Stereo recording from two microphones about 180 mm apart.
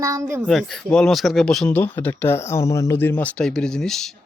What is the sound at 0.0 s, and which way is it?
Speech, 15° right (ahead or behind).